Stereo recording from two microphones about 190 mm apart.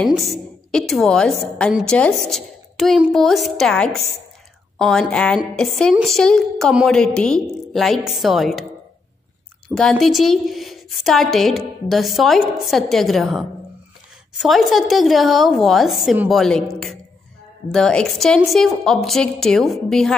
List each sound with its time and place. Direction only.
0.0 s a woman's voice: centre (ahead or behind)
9.8 s a woman's voice: centre (ahead or behind)